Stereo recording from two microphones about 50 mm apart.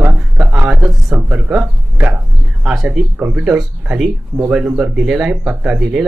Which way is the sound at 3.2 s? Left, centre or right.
Right.